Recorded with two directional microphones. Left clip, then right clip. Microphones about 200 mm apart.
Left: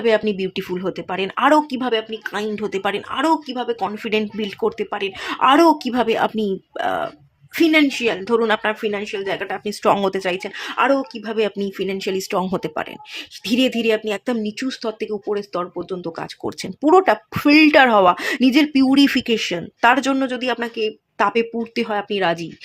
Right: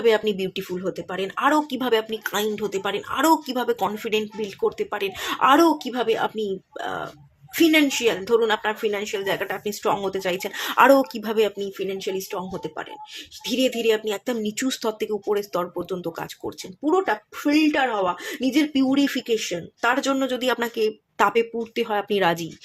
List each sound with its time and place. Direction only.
0.0 s a woman's voice: 15° left (ahead or behind)
1.9 s speech: centre (ahead or behind)
2.6 s speech: 20° left (ahead or behind)
3.1 s speech: 5° left (ahead or behind)
3.9 s a woman's voice: 15° left (ahead or behind)
4.2 s speech: 30° left (ahead or behind)
4.9 s a woman's voice: 10° left (ahead or behind)
5.6 s speech: 25° left (ahead or behind)
7.6 s a woman's voice: 15° left (ahead or behind)
9.8 s speech: 25° left (ahead or behind)
10.6 s a woman's voice: 10° right (ahead or behind)
11.5 s speech: 30° left (ahead or behind)
14.4 s speech: centre (ahead or behind)
16.4 s speech: 30° left (ahead or behind); by 22.4 s 5° left (ahead or behind)